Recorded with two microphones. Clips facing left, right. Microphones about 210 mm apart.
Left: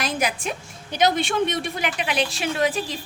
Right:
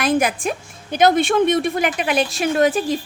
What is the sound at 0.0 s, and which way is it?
A woman's voice, 50° right (ahead or behind).